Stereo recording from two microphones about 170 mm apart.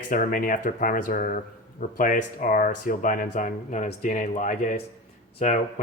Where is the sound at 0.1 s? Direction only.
55° left (ahead or behind).